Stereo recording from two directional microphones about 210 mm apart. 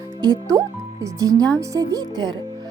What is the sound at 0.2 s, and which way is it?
Speech, 20° right (ahead or behind).